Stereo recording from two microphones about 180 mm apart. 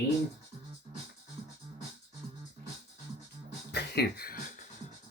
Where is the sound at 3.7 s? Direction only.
65° left (ahead or behind); by 4.6 s 50° left (ahead or behind).